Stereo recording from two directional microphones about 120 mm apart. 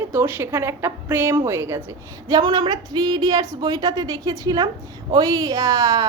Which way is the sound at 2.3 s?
35° right (ahead or behind).